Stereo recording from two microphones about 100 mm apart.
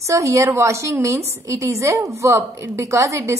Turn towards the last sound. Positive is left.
turn(degrees=-30)  # may be behind; listen again after turning